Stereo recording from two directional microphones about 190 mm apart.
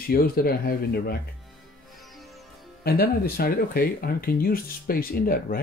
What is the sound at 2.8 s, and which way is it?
Speech, 55° left (ahead or behind).